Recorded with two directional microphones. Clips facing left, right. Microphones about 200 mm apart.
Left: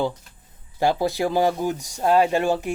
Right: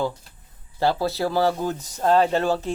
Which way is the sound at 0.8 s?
15° left (ahead or behind).